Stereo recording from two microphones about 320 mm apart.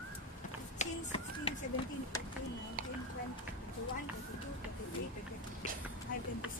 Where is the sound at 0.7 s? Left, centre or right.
Centre.